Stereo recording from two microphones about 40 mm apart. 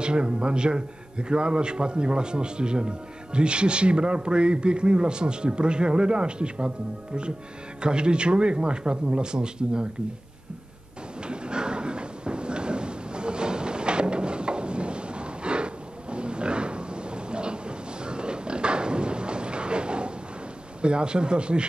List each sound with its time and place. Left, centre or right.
0.0 s a man's voice: right
7.8 s a man's voice: right
11.2 s a sound: right
20.8 s a man's voice: right